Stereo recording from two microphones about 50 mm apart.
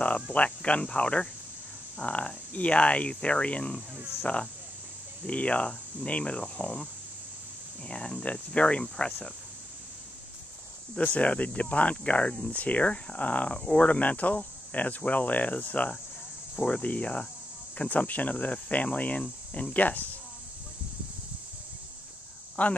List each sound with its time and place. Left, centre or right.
0.0 s speech: left
7.9 s speech: centre
11.0 s speech: left
22.6 s speech: left